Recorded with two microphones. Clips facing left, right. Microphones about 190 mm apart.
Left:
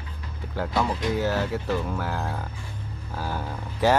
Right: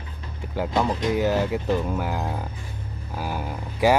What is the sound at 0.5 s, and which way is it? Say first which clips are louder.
Speech: right 2 dB; 15° right (ahead or behind).